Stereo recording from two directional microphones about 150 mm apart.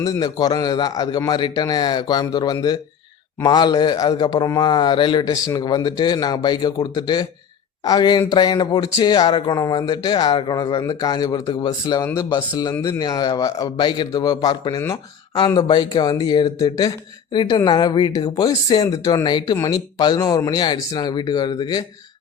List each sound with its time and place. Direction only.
0.0 s a man's voice: 25° left (ahead or behind)